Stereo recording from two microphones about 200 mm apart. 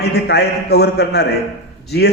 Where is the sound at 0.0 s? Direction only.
55° left (ahead or behind).